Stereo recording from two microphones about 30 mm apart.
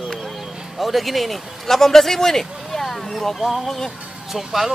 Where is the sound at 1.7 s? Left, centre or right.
Centre.